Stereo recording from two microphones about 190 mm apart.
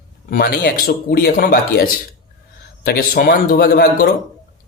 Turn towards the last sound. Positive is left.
turn(degrees=55)  # may be behind; listen again after turning